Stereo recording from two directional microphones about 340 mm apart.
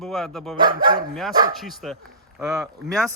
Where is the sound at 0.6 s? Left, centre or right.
Right.